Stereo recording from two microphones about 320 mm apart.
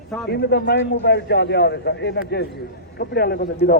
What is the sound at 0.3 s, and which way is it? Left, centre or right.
A man's voice, left.